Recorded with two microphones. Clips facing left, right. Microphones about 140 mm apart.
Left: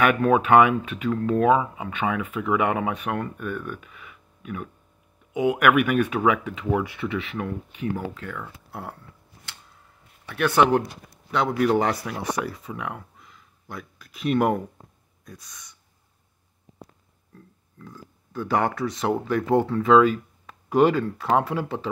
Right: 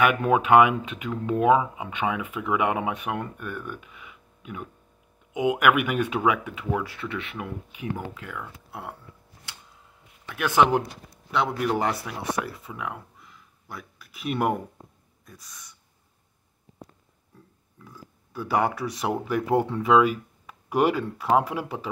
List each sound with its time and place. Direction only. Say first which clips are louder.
0.0 s speech: left 2 dB; 15° right (ahead or behind)
6.7 s speech: left 4 dB; 10° left (ahead or behind)
10.3 s speech: left 2 dB; 15° right (ahead or behind)
11.3 s speech: left 4 dB; 5° right (ahead or behind)
17.8 s speech: left 3 dB; 10° right (ahead or behind)